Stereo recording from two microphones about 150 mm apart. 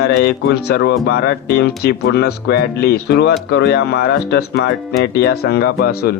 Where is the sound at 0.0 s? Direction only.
90° left.